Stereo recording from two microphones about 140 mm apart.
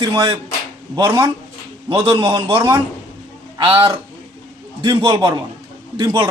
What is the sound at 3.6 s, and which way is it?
Speech, 30° right (ahead or behind).